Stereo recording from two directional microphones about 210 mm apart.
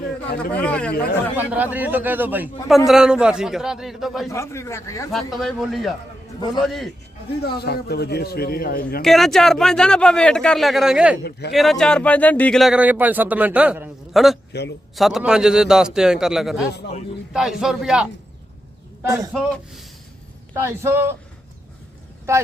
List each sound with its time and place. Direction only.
0.5 s speech: 5° left (ahead or behind)
1.4 s a man's voice: 10° right (ahead or behind)
4.3 s speech: 15° left (ahead or behind)
5.3 s speech: centre (ahead or behind)
7.4 s a man's voice: 50° left (ahead or behind)
9.0 s speech: centre (ahead or behind)
11.2 s a man's voice: 50° left (ahead or behind)
11.5 s speech: centre (ahead or behind)
14.5 s a man's voice: 50° left (ahead or behind)
14.9 s speech: centre (ahead or behind)
19.0 s a man's voice: 15° right (ahead or behind)
19.3 s speech: centre (ahead or behind)
20.5 s a man's voice: 10° right (ahead or behind)